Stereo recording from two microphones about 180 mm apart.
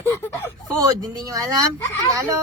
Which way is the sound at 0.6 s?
20° right (ahead or behind).